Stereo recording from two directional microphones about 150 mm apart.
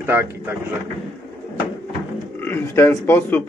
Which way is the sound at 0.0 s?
15° right (ahead or behind).